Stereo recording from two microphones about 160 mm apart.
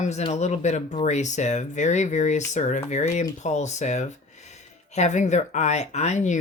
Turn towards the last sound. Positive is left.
turn(degrees=50)  # may be behind; listen again after turning